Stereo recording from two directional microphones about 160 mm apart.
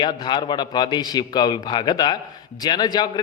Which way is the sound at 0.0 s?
30° left (ahead or behind).